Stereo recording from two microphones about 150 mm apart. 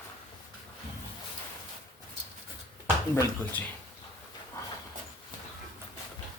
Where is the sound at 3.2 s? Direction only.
10° left (ahead or behind).